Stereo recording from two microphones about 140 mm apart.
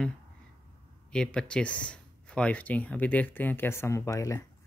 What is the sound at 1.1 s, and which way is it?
Speech, 5° left (ahead or behind).